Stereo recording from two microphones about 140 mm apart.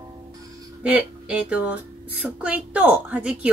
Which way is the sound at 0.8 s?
10° right (ahead or behind).